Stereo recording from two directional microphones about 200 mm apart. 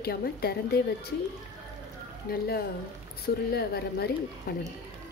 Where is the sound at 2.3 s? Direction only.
50° left (ahead or behind).